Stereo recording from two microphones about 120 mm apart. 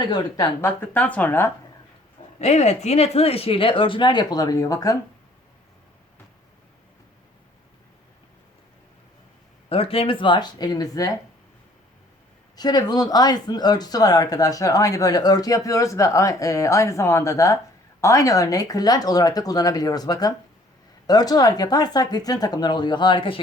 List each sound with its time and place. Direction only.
0.6 s speech: 15° left (ahead or behind)
2.4 s speech: 70° left (ahead or behind); by 4.9 s 30° left (ahead or behind)
9.6 s speech: 50° left (ahead or behind); by 11.1 s 30° left (ahead or behind)
12.5 s speech: 35° left (ahead or behind)